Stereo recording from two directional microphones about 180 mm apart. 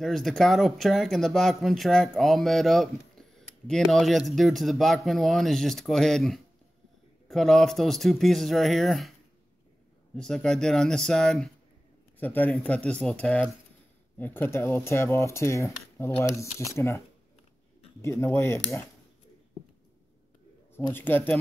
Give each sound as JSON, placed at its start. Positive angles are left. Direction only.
{"t": 0.0, "sound": "speech", "side_deg": 0}
{"t": 10.1, "sound": "speech", "side_deg": 5}
{"t": 18.0, "sound": "speech", "side_deg": 15}
{"t": 20.7, "sound": "a man's voice", "side_deg": 10}